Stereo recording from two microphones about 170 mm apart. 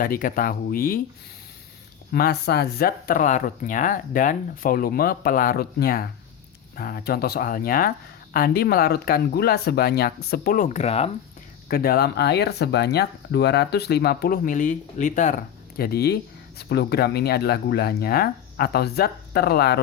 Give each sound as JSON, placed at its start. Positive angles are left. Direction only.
{"t": 0.0, "sound": "speech", "side_deg": 55}
{"t": 2.1, "sound": "speech", "side_deg": 70}
{"t": 11.7, "sound": "speech", "side_deg": 65}